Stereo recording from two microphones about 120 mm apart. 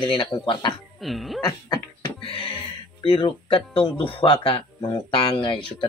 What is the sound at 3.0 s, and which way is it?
Speech, 45° left (ahead or behind).